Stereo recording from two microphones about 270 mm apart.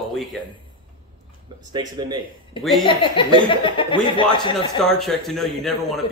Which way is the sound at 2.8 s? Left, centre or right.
Centre.